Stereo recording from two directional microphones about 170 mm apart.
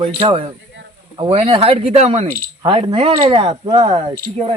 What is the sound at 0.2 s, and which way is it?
Speech, 35° right (ahead or behind).